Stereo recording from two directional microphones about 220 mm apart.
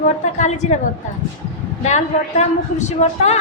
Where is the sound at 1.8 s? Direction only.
30° left (ahead or behind).